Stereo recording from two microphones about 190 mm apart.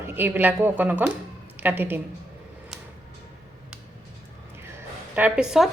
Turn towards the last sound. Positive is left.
turn(degrees=-5)  # may be behind; listen again after turning